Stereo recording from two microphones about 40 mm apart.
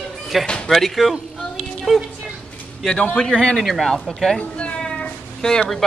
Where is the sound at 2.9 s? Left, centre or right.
Left.